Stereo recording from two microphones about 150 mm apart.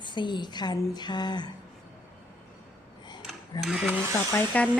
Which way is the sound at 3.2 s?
Centre (ahead or behind).